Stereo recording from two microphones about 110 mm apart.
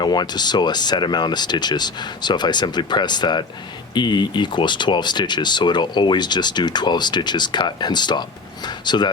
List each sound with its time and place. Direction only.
0.0 s speech: 40° left (ahead or behind)